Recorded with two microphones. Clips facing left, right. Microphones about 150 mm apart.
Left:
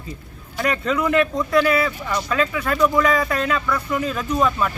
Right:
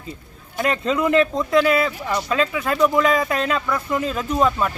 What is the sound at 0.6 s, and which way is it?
Speech, 25° right (ahead or behind).